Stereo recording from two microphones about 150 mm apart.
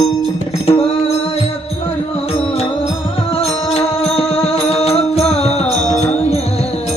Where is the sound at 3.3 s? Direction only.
45° left (ahead or behind).